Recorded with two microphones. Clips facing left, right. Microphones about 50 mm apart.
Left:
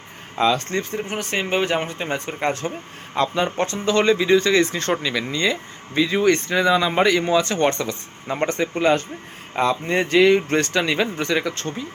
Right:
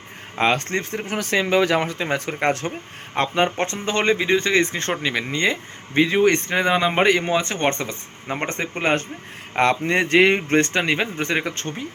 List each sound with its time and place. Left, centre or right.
0.3 s speech: right
1.8 s speech: right
2.5 s speech: right
3.2 s speech: right
9.6 s speech: right